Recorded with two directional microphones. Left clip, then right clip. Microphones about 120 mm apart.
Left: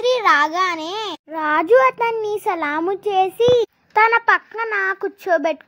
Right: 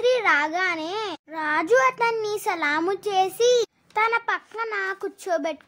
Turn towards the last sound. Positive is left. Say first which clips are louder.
# left 7 dB
turn(degrees=5)  # may be behind; listen again after turning